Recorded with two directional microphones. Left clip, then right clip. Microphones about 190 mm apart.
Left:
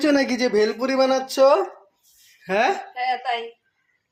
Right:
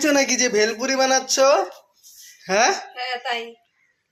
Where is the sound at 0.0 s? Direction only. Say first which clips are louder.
Right 1 dB; 25° left (ahead or behind).